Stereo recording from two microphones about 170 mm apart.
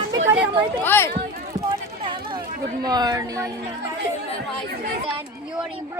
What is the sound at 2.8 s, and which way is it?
Speech, 25° right (ahead or behind).